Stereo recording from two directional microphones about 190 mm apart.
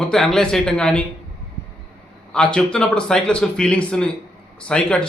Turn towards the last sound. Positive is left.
turn(degrees=5)  # may be behind; listen again after turning